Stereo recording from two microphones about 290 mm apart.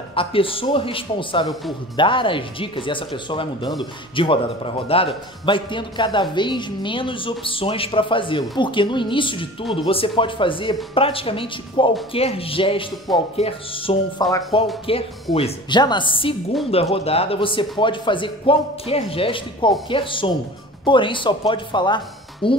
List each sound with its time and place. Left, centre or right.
0.1 s speech: centre